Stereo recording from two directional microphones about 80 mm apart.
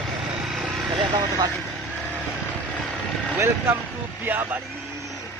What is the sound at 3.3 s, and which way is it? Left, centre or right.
Speech, right.